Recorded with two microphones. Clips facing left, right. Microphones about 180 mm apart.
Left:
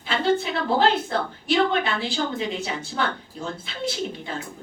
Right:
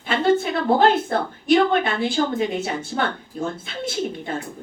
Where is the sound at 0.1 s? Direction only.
50° right (ahead or behind).